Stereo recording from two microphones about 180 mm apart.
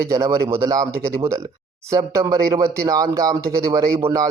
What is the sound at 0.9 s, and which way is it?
Speech, 60° right (ahead or behind).